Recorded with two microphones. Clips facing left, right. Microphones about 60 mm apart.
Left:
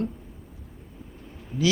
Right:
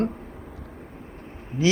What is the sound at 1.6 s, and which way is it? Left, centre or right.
Speech, right.